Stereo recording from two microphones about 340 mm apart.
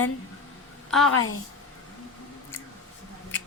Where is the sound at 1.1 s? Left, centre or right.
Left.